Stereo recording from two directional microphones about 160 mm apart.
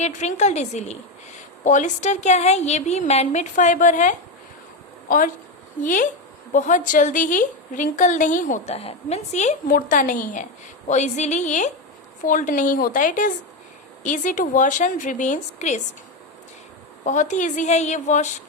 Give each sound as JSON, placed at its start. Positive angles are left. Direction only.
{"t": 0.0, "sound": "a woman's voice", "side_deg": 45}
{"t": 10.8, "sound": "a woman's voice", "side_deg": 45}
{"t": 17.1, "sound": "a woman's voice", "side_deg": 50}